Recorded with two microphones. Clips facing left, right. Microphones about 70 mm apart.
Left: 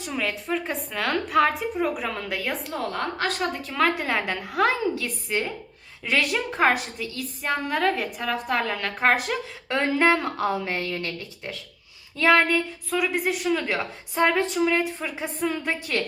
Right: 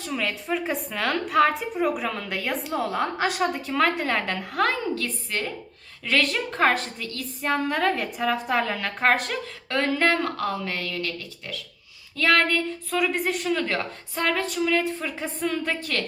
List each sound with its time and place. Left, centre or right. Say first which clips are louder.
0.1 s a woman's voice: even; centre
12.9 s a woman's voice: even; centre
14.2 s a sound: left 4 dB; left
15.0 s a woman's voice: left 1 dB; centre